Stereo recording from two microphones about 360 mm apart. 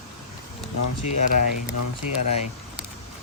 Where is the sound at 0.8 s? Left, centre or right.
Left.